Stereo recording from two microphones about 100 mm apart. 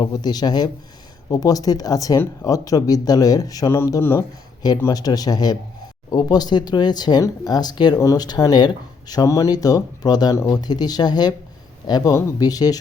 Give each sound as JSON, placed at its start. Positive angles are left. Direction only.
{"t": 0.0, "sound": "speech", "side_deg": 45}
{"t": 4.9, "sound": "speech", "side_deg": 40}